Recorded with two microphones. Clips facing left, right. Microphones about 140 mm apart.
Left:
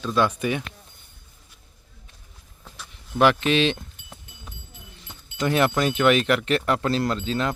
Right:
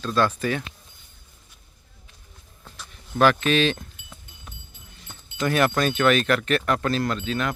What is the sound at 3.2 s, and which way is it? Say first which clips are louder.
Speech: even; 20° left (ahead or behind).